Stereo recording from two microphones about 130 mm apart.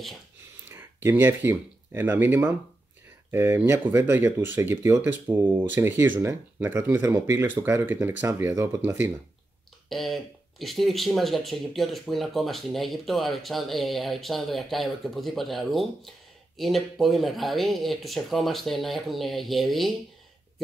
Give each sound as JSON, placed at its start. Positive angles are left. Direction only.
{"t": 0.7, "sound": "speech", "side_deg": -15}
{"t": 9.8, "sound": "speech", "side_deg": 0}